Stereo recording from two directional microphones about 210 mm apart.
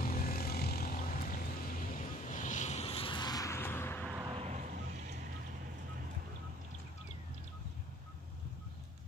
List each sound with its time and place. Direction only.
0.0 s vehicle: 45° left (ahead or behind); by 4.1 s 10° left (ahead or behind)
4.3 s vehicle: 30° right (ahead or behind)